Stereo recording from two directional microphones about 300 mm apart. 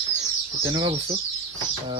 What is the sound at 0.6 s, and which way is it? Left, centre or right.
Speech, centre.